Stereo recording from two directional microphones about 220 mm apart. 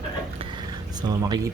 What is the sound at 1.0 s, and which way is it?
Speech, 20° right (ahead or behind).